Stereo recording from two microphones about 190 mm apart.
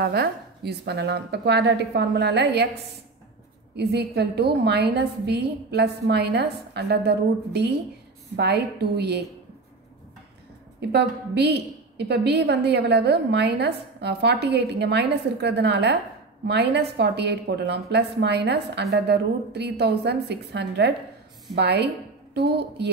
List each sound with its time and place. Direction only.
0.0 s a woman's voice: 55° right (ahead or behind)
3.7 s a woman's voice: 60° right (ahead or behind)
10.8 s a woman's voice: 60° right (ahead or behind)